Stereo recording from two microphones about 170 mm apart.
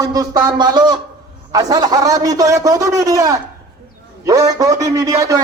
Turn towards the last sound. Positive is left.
turn(degrees=-20)  # may be behind; listen again after turning